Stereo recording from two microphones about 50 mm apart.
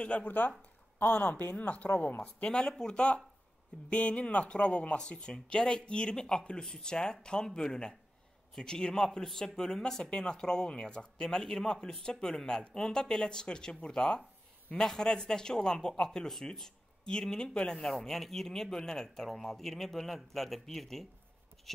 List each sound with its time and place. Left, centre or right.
0.0 s a man's voice: left; by 21.8 s centre